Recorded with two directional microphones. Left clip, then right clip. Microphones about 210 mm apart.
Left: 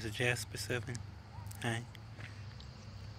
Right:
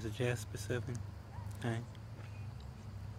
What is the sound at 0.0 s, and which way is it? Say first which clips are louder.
Speech: left 4 dB; 5° right (ahead or behind).